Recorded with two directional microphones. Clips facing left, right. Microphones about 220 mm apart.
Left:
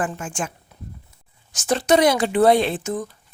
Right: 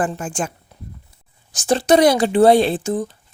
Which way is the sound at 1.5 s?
30° right (ahead or behind).